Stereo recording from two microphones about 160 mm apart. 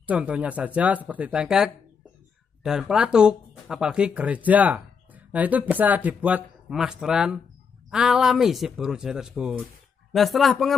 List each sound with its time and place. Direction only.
0.0 s speech: 10° right (ahead or behind)